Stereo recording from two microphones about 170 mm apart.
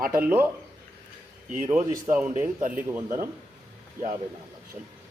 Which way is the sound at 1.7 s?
10° right (ahead or behind).